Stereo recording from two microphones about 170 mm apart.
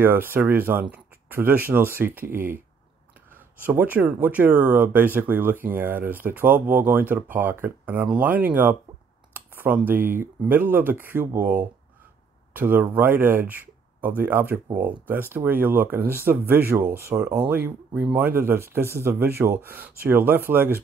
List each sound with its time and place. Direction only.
0.0 s speech: 10° right (ahead or behind)